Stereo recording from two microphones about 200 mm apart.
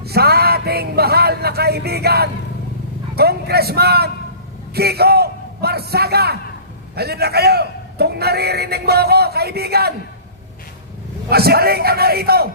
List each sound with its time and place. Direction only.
0.0 s a man's voice: 50° right (ahead or behind)
11.3 s a man's voice: 50° right (ahead or behind)